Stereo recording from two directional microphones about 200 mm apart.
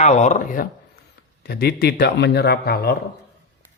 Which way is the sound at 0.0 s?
35° left (ahead or behind).